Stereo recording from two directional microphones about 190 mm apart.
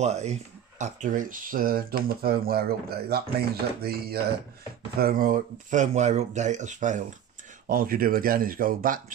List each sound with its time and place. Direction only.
0.0 s speech: 35° right (ahead or behind)